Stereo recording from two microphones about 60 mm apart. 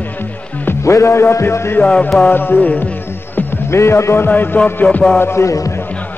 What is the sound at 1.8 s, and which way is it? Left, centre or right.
Music, left.